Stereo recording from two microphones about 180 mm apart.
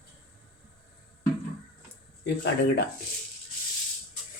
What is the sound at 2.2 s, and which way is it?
Speech, 70° left (ahead or behind).